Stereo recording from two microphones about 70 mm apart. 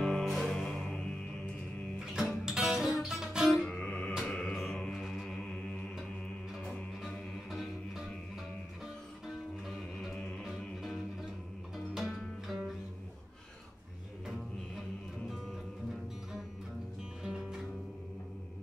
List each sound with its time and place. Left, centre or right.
0.0 s music: centre
2.1 s music: centre
3.6 s music: centre
4.2 s music: centre
10.1 s music: centre
17.2 s music: centre